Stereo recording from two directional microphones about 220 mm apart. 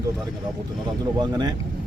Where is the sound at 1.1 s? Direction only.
20° right (ahead or behind).